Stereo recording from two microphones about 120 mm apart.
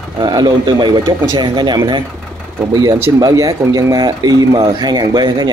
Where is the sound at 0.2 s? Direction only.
40° right (ahead or behind).